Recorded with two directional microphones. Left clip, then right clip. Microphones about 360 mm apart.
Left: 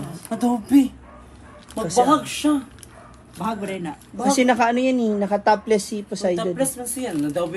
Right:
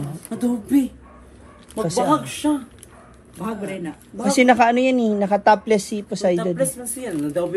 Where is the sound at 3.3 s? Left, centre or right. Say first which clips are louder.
Left 2 dB; centre.